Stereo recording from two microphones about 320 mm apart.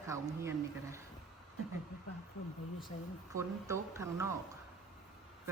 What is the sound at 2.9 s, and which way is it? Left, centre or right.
Speech, centre.